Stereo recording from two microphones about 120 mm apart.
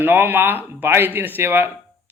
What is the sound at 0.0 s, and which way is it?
Speech, 15° right (ahead or behind).